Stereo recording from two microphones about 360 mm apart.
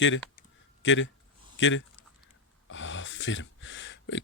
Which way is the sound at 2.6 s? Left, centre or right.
Left.